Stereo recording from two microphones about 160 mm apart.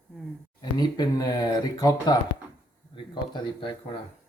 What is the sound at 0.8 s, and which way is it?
Speech, 25° left (ahead or behind).